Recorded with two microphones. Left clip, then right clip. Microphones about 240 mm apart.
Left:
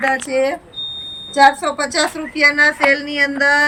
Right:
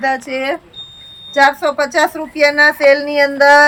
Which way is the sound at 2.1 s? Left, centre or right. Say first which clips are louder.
Right 2 dB; centre.